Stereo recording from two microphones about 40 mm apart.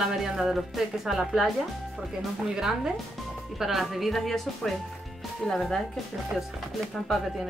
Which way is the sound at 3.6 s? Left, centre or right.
Centre.